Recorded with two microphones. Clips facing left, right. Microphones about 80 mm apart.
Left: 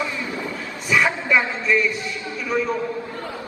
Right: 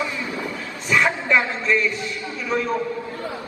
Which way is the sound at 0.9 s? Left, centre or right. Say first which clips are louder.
Even; centre.